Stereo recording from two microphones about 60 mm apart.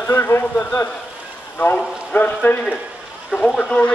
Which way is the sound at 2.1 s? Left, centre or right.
Left.